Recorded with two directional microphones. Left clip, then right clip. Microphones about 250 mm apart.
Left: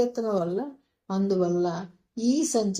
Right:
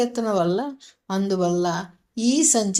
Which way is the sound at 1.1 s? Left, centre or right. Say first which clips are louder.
Right 3 dB; right.